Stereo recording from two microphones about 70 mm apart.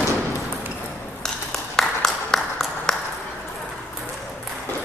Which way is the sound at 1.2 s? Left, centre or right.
Centre.